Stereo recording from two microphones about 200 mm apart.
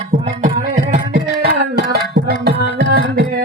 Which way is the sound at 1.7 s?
55° right (ahead or behind).